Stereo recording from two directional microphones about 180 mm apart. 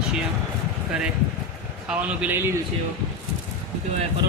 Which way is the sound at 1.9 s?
10° right (ahead or behind).